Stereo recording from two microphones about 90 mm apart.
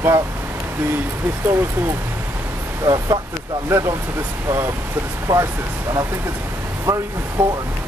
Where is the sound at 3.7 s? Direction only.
35° right (ahead or behind).